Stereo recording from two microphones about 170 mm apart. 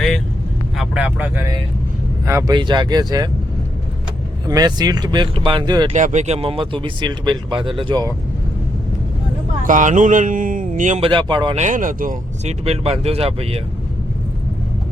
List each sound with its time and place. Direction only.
0.8 s speech: 10° right (ahead or behind)
4.4 s speech: 20° right (ahead or behind)
5.9 s speech: 45° right (ahead or behind)
9.6 s speech: 50° right (ahead or behind)
11.0 s speech: 30° right (ahead or behind)
11.5 s speech: 45° right (ahead or behind)
12.6 s speech: 35° right (ahead or behind)